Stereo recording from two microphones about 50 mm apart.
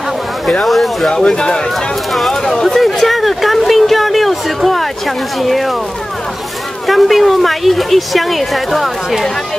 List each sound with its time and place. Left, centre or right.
0.7 s speech: centre
1.1 s speech: centre
2.1 s speech: centre
6.9 s speech: centre